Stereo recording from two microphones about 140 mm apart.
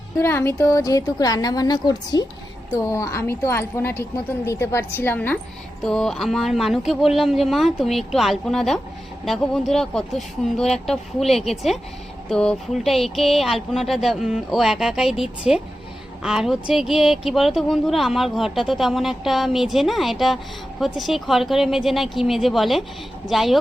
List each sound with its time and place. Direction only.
0.2 s a woman's voice: 15° left (ahead or behind); by 23.6 s centre (ahead or behind)